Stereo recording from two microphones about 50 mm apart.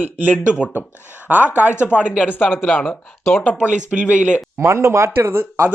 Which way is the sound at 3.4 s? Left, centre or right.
Left.